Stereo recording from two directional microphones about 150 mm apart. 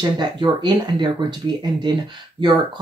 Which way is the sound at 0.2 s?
30° right (ahead or behind).